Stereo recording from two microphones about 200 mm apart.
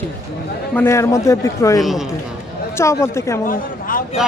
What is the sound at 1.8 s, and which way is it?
Speech, centre (ahead or behind).